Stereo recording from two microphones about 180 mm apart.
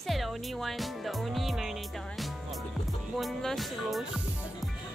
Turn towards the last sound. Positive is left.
turn(degrees=0)  # may be behind; listen again after turning